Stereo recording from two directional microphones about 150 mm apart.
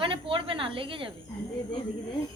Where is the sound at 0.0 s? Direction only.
35° right (ahead or behind).